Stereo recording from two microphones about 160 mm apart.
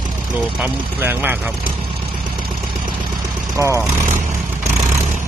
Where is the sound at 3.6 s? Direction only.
20° right (ahead or behind).